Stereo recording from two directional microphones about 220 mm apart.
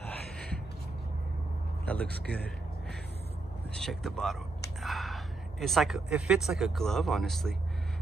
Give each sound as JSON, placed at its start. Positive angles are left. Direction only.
{"t": 2.0, "sound": "speech", "side_deg": -45}
{"t": 3.8, "sound": "speech", "side_deg": 0}